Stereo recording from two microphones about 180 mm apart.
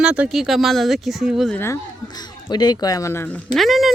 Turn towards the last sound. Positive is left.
turn(degrees=0)  # may be behind; listen again after turning